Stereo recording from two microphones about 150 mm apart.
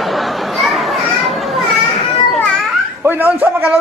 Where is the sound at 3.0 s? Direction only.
10° right (ahead or behind).